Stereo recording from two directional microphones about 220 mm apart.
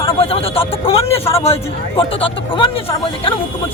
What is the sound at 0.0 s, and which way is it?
A man's voice, 25° left (ahead or behind).